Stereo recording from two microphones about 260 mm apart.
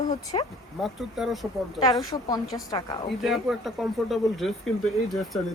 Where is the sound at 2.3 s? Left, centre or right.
Centre.